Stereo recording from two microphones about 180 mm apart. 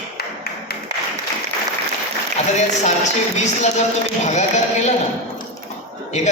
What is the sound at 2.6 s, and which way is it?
A man's voice, 40° left (ahead or behind).